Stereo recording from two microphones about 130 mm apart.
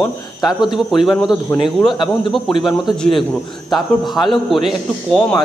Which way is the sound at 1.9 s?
35° left (ahead or behind).